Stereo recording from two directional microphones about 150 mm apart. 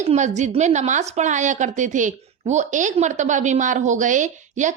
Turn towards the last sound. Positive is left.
turn(degrees=-55)  # may be behind; listen again after turning